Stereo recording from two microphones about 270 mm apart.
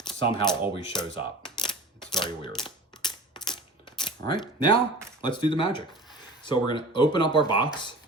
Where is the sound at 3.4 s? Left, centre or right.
Centre.